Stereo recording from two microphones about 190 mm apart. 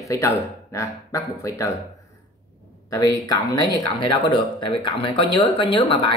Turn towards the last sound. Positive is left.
turn(degrees=25)  # may be behind; listen again after turning